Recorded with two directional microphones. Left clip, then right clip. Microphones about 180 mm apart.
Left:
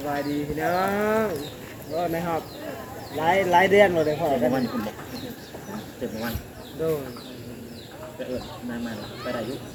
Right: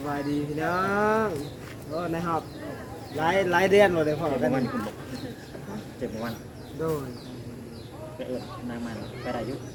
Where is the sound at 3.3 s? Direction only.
30° right (ahead or behind).